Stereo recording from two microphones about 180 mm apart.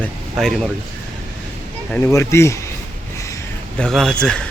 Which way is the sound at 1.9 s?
10° left (ahead or behind).